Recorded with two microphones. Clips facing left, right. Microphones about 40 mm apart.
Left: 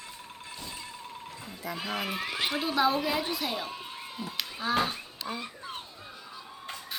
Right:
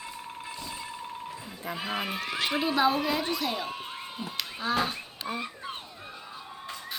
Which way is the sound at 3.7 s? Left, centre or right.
Right.